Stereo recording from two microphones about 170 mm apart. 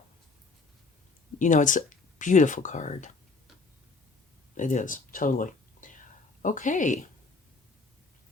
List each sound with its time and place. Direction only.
1.4 s speech: 45° left (ahead or behind)
4.5 s a woman's voice: 45° left (ahead or behind)